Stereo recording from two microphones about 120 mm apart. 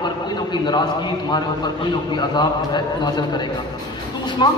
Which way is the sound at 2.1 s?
40° left (ahead or behind).